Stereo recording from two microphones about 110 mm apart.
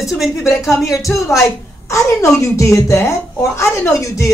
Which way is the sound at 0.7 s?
Centre (ahead or behind).